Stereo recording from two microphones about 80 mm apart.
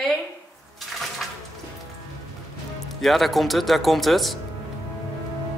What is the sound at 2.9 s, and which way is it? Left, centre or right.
Speech, centre.